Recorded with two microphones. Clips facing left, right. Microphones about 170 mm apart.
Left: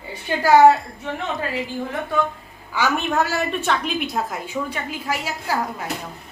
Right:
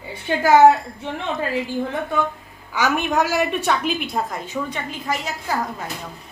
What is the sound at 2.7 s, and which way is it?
A woman's voice, 15° right (ahead or behind).